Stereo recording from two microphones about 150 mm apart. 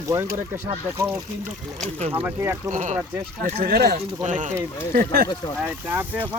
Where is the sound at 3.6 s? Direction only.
90° right.